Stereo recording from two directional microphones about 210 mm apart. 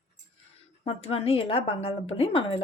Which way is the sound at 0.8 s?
30° left (ahead or behind).